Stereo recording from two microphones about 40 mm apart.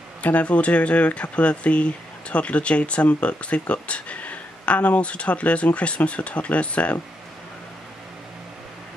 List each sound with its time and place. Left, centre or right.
0.2 s speech: left